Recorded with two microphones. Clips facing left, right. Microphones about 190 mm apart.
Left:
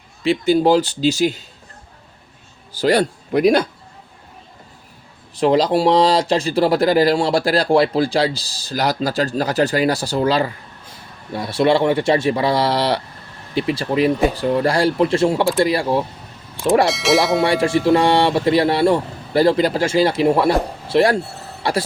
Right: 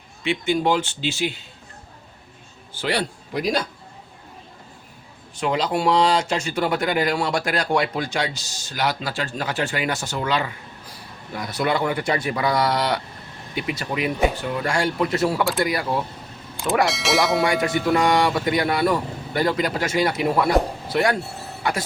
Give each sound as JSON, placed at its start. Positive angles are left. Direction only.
{"t": 0.3, "sound": "speech", "side_deg": 35}
{"t": 2.7, "sound": "a man's voice", "side_deg": 40}
{"t": 5.3, "sound": "speech", "side_deg": 35}
{"t": 16.8, "sound": "speech", "side_deg": 0}
{"t": 17.4, "sound": "speech", "side_deg": 30}